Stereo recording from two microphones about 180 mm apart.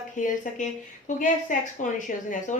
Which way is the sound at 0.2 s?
45° left (ahead or behind).